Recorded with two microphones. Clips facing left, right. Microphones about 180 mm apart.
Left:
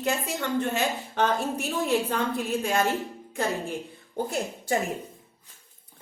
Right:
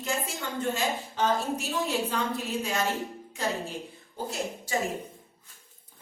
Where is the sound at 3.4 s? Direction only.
50° left (ahead or behind).